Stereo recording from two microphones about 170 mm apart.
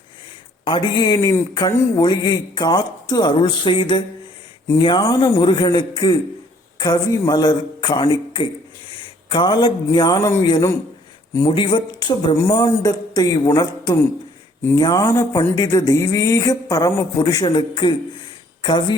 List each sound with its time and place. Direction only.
0.6 s a man's voice: 30° left (ahead or behind)